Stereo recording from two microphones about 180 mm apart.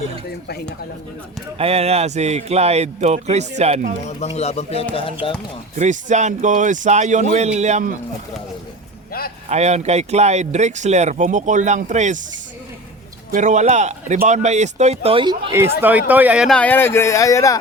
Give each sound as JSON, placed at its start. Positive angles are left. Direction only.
{"t": 1.5, "sound": "speech", "side_deg": -35}
{"t": 4.0, "sound": "speech", "side_deg": 40}
{"t": 5.7, "sound": "speech", "side_deg": -40}
{"t": 9.5, "sound": "speech", "side_deg": -40}
{"t": 13.3, "sound": "speech", "side_deg": -40}
{"t": 15.8, "sound": "speech", "side_deg": -10}
{"t": 16.6, "sound": "speech", "side_deg": 10}